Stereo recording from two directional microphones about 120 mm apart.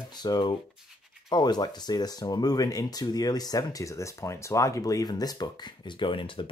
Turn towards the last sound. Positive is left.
turn(degrees=45)  # may be behind; listen again after turning